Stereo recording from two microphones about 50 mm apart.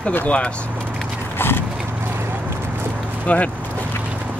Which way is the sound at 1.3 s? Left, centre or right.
Left.